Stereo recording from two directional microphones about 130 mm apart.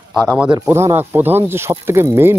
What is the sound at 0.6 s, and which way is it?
Speech, 20° right (ahead or behind).